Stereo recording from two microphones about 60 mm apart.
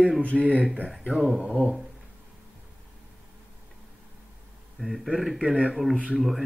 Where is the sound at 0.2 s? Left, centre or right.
Left.